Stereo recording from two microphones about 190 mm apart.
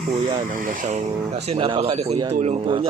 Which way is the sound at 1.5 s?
30° right (ahead or behind).